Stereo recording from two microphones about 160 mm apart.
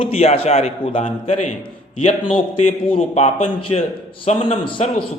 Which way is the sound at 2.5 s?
40° left (ahead or behind).